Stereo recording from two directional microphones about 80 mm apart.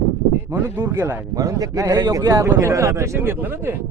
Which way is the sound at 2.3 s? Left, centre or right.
Right.